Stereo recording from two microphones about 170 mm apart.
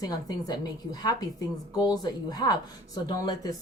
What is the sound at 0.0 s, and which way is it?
Speech, 20° left (ahead or behind).